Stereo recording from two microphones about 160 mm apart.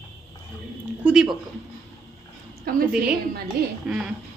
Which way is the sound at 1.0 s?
5° right (ahead or behind).